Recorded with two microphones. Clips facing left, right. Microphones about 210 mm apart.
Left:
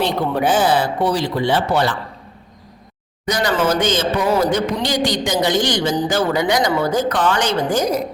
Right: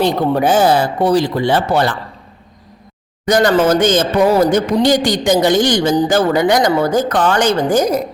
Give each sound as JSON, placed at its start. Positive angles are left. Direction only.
{"t": 0.0, "sound": "a man's voice", "side_deg": -45}
{"t": 3.2, "sound": "a man's voice", "side_deg": -50}